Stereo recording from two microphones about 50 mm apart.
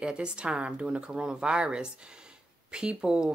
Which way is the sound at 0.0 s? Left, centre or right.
Centre.